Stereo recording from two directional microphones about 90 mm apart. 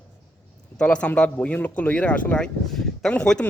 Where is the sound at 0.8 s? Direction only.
10° left (ahead or behind).